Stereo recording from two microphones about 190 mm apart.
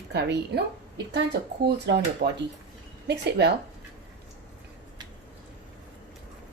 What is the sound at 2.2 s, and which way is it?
Speech, 50° right (ahead or behind).